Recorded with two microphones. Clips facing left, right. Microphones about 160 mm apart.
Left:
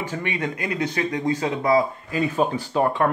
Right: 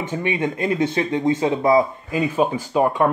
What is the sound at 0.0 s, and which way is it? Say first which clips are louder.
Speech: right 4 dB; 20° right (ahead or behind).